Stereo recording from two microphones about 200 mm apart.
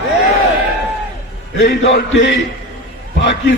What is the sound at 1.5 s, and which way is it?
Speech, 60° left (ahead or behind).